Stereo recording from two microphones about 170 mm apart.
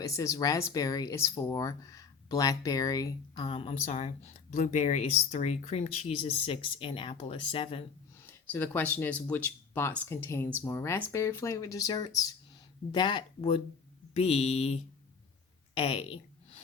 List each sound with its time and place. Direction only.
0.0 s speech: 20° left (ahead or behind)
8.3 s speech: 10° left (ahead or behind); by 14.8 s 35° left (ahead or behind)
15.8 s speech: 35° left (ahead or behind)